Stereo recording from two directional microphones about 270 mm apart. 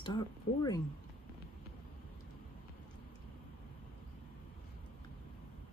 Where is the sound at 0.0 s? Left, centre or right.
Centre.